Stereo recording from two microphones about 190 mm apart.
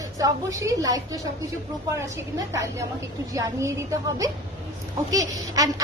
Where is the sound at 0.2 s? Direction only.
15° right (ahead or behind).